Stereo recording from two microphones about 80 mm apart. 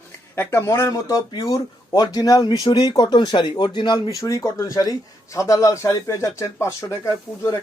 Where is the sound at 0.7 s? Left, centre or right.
Left.